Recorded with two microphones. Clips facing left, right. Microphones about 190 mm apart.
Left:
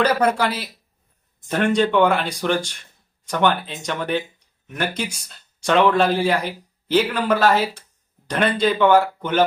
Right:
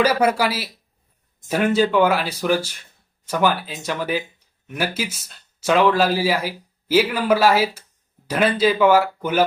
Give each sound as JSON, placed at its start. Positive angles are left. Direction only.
{"t": 0.0, "sound": "speech", "side_deg": -5}